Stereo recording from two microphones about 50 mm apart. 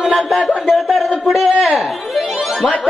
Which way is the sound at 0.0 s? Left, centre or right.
Centre.